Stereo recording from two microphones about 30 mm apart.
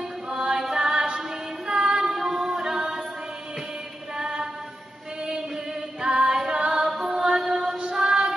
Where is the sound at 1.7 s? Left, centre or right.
Right.